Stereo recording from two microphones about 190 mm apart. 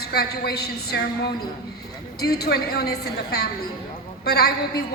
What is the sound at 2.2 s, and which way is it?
A woman's voice, 55° left (ahead or behind).